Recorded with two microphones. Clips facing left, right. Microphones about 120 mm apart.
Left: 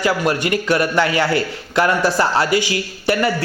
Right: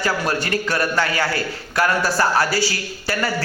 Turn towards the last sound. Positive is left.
turn(degrees=20)  # may be behind; listen again after turning